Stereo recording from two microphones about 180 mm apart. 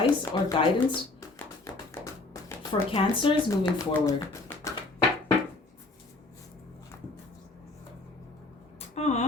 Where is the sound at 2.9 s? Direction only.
30° left (ahead or behind).